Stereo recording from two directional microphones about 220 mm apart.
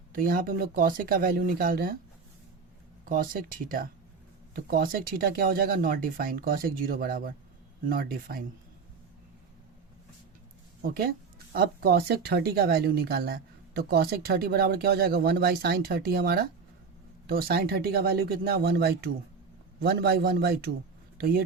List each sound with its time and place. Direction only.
0.1 s speech: 40° right (ahead or behind)
3.1 s speech: 40° right (ahead or behind)
10.8 s speech: 45° right (ahead or behind)